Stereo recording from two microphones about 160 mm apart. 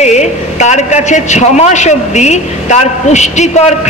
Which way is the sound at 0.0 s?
45° left (ahead or behind).